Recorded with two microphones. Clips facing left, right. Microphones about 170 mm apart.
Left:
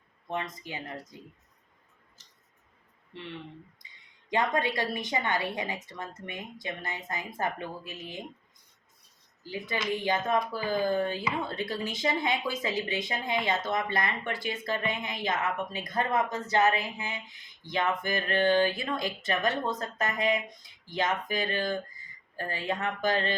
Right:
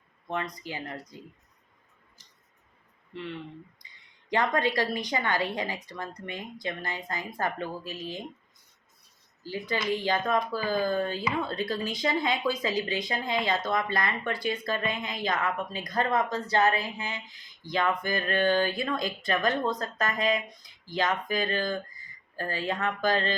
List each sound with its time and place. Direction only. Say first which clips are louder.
0.3 s speech: right 1 dB; 20° left (ahead or behind)
3.8 s a sound: even; 20° left (ahead or behind)
4.3 s speech: right 2 dB; 20° left (ahead or behind)
9.4 s speech: right 2 dB; 20° left (ahead or behind)